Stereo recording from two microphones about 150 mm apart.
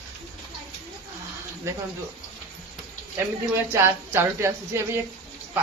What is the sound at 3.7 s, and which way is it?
A man's voice, 15° right (ahead or behind).